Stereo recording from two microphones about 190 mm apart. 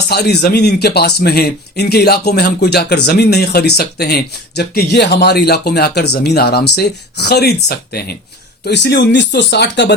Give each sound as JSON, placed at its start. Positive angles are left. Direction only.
{"t": 0.1, "sound": "speech", "side_deg": 60}